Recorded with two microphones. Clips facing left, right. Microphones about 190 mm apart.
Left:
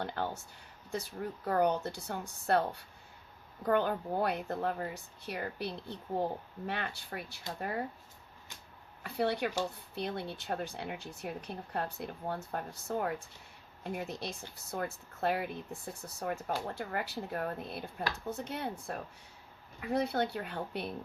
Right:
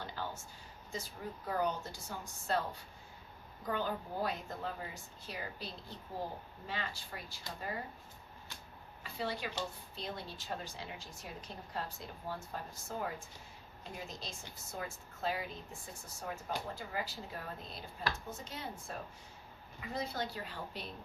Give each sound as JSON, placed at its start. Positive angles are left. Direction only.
{"t": 0.0, "sound": "speech", "side_deg": 60}
{"t": 9.0, "sound": "speech", "side_deg": 65}